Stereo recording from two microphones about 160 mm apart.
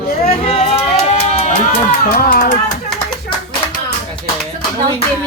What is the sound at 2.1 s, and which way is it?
Speech, 65° left (ahead or behind).